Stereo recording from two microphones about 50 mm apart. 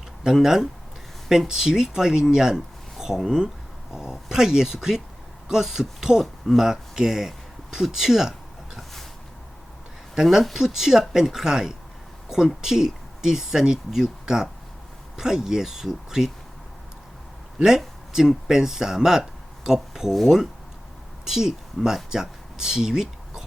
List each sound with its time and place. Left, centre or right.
0.4 s speech: centre
10.4 s speech: centre
18.1 s speech: centre